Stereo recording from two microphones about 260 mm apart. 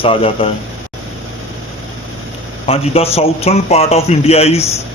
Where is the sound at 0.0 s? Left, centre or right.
Left.